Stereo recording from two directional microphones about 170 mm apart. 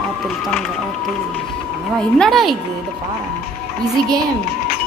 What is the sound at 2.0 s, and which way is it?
Speech, centre (ahead or behind).